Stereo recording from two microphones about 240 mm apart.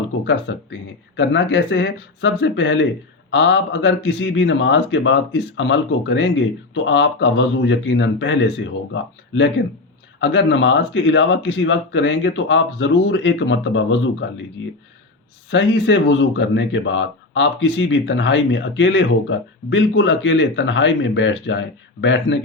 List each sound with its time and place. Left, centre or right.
0.3 s speech: left
15.4 s speech: left